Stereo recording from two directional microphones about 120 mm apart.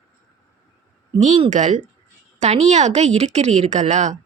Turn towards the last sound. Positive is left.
turn(degrees=-80)